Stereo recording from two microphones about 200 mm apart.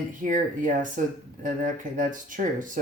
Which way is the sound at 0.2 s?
40° right (ahead or behind).